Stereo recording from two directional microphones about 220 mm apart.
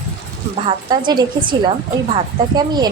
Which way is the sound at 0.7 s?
20° right (ahead or behind).